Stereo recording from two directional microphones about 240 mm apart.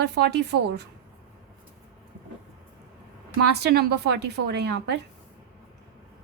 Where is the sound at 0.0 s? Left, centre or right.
Right.